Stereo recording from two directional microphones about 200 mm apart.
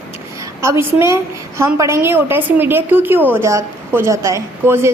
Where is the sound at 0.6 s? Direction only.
15° right (ahead or behind).